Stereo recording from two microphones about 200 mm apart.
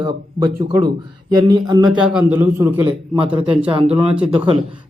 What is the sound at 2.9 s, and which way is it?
A man's voice, 25° right (ahead or behind).